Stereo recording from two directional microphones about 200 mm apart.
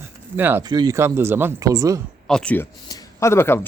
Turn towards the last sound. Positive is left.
turn(degrees=10)  # may be behind; listen again after turning